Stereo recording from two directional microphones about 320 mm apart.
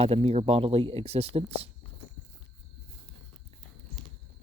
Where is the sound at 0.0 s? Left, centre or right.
Centre.